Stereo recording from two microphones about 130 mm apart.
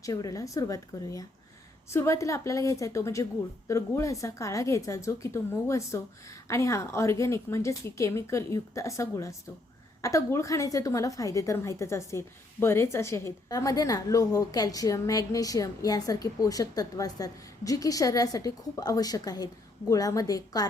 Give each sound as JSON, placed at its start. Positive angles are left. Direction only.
{"t": 0.0, "sound": "a woman's voice", "side_deg": 25}